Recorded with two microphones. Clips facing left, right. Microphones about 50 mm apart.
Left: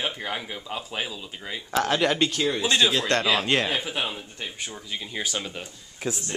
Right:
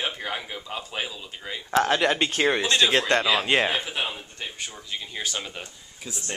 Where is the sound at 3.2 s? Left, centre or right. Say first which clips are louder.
Even; centre.